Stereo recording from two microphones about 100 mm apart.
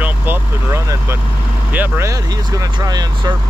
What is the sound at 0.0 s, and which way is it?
Vehicle, 20° right (ahead or behind).